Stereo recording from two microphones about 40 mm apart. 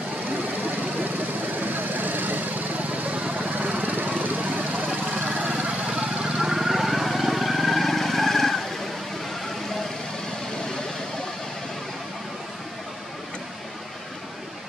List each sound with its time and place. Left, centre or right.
1.5 s vehicle: right
5.6 s vehicle: right
6.3 s vehicle: centre